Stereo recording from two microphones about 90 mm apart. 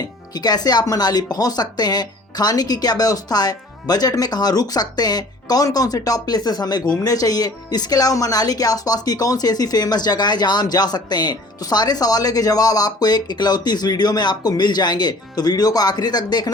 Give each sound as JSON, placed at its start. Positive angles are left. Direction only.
{"t": 0.3, "sound": "speech", "side_deg": 50}